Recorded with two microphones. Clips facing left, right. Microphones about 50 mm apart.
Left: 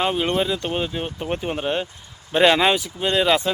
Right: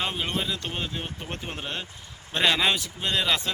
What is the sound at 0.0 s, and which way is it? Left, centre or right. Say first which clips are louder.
Speech: left 8 dB; centre.